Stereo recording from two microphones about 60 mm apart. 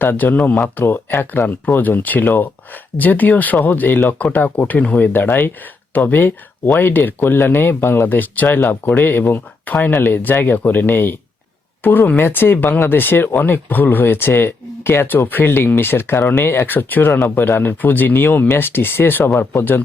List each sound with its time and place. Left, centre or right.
0.0 s speech: left